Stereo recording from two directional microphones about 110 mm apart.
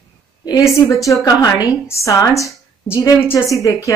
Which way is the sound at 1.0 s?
30° left (ahead or behind).